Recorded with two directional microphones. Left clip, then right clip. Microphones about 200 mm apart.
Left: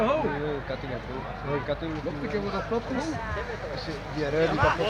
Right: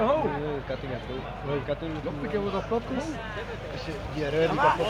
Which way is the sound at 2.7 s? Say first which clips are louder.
Even; 30° right (ahead or behind).